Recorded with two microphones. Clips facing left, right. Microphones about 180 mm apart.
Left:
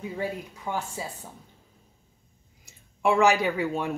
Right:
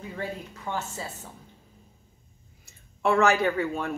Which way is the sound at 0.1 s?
15° left (ahead or behind).